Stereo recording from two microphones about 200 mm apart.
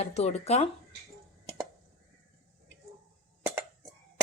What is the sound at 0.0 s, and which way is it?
Speech, 35° left (ahead or behind).